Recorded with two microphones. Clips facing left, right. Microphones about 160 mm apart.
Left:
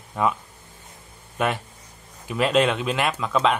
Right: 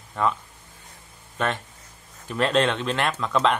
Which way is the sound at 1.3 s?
10° left (ahead or behind).